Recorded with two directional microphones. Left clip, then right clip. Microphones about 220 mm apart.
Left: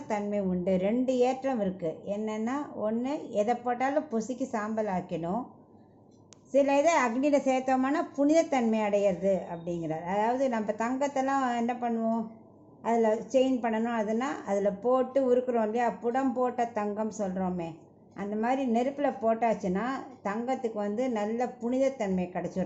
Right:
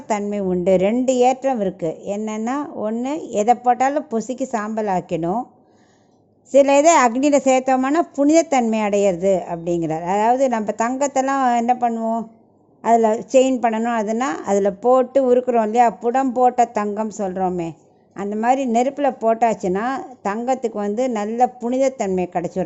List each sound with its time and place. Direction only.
0.1 s a woman's voice: 45° right (ahead or behind)
6.5 s a woman's voice: 45° right (ahead or behind)